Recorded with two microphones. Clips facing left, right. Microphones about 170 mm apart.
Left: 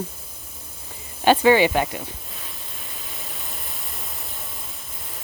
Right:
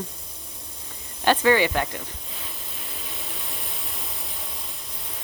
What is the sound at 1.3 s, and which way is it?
Speech, 20° left (ahead or behind).